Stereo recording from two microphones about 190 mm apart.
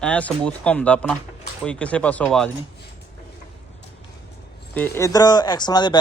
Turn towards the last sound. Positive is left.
turn(degrees=20)  # may be behind; listen again after turning